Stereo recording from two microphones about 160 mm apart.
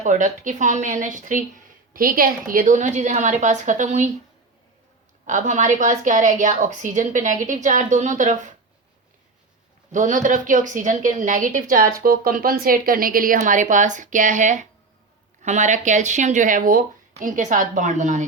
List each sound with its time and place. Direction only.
0.0 s a woman's voice: 50° right (ahead or behind)
5.2 s a woman's voice: 50° right (ahead or behind)
9.9 s a woman's voice: 55° right (ahead or behind)